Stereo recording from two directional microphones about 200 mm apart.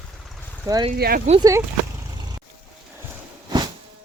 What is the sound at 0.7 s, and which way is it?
Speech, 20° right (ahead or behind).